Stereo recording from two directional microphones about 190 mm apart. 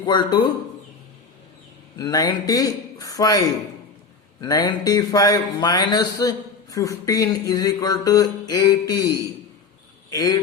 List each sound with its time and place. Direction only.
0.0 s speech: 20° left (ahead or behind)
2.0 s speech: 20° left (ahead or behind)